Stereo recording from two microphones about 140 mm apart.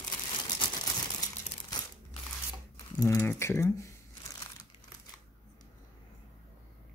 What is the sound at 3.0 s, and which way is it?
Speech, 20° left (ahead or behind).